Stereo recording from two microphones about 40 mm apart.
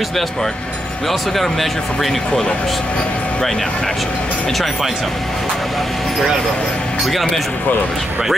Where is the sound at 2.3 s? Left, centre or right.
Left.